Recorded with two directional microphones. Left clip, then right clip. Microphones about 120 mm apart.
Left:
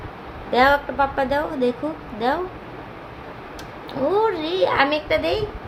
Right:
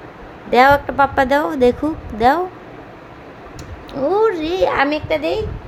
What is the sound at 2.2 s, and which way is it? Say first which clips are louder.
Speech: right 8 dB; 90° right.